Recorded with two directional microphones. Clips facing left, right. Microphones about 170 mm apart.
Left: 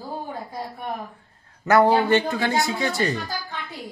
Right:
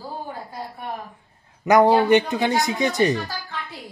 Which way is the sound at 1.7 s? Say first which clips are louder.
Right 2 dB; 15° right (ahead or behind).